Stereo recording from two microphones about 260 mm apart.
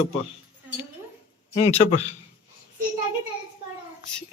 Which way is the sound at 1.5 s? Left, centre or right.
Left.